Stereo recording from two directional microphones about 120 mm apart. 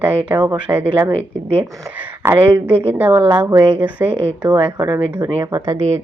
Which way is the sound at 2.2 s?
20° right (ahead or behind).